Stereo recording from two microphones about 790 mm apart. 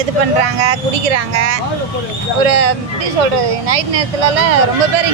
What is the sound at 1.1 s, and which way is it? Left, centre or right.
Speech, right.